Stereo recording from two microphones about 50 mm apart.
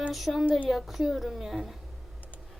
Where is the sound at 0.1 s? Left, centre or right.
Centre.